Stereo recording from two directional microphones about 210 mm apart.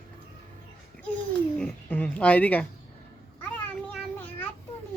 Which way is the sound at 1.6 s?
5° left (ahead or behind).